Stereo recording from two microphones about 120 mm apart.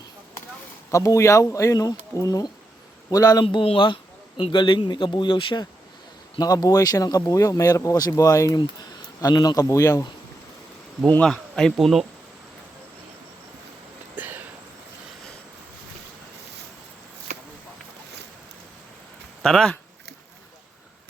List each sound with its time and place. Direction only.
0.9 s speech: 25° left (ahead or behind)
3.4 s a man's voice: 50° left (ahead or behind)
6.4 s speech: 30° left (ahead or behind)
11.0 s speech: 5° left (ahead or behind)
14.2 s a sound: 15° right (ahead or behind)
19.4 s speech: 5° left (ahead or behind)